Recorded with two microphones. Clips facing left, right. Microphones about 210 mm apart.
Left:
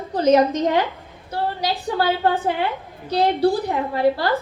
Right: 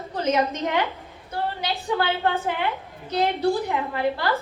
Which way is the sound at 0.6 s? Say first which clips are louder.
Left 5 dB; 35° left (ahead or behind).